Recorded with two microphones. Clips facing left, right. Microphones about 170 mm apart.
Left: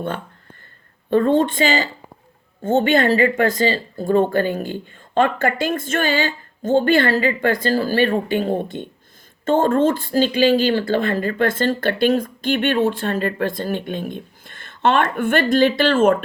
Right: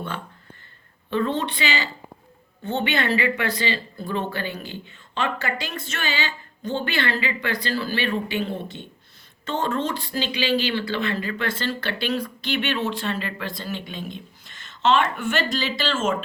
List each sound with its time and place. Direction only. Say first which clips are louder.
1.1 s speech: left 8 dB; 50° left (ahead or behind)